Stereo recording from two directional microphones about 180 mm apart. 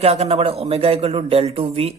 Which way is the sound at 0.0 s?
35° right (ahead or behind).